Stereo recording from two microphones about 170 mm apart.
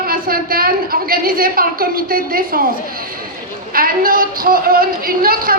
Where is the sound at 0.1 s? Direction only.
60° right (ahead or behind).